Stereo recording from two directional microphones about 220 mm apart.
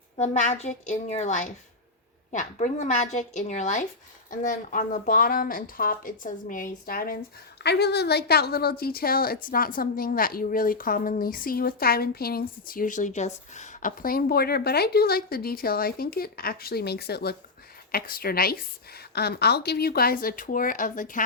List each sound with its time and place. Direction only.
0.2 s a woman's voice: 30° left (ahead or behind)